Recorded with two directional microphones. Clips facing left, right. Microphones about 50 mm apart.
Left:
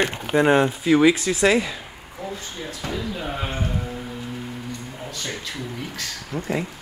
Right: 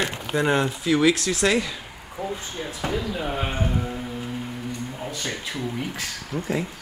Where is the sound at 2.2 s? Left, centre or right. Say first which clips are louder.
Right 2 dB; right.